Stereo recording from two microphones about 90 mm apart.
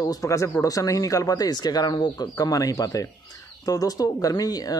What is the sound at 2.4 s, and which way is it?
Speech, 40° left (ahead or behind).